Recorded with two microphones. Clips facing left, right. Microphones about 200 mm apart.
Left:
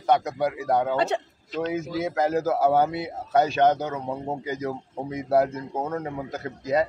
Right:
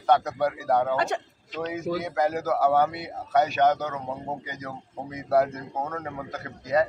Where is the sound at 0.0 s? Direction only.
20° left (ahead or behind).